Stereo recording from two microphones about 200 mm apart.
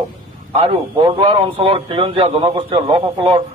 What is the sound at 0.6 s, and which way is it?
A man's voice, 25° right (ahead or behind).